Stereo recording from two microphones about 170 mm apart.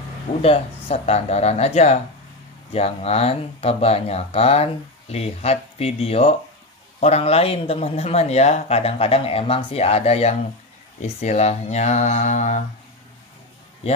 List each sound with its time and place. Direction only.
0.4 s speech: 35° left (ahead or behind)